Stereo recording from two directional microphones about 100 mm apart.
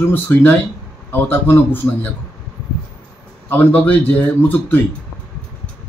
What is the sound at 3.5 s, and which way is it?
A man's voice, 15° left (ahead or behind).